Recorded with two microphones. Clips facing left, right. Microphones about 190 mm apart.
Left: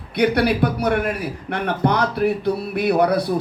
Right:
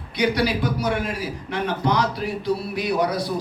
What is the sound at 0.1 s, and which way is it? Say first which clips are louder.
A man's voice: left 4 dB; 60° left (ahead or behind).